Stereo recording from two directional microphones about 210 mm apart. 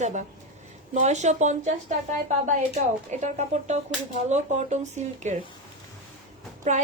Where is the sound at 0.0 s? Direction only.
35° right (ahead or behind).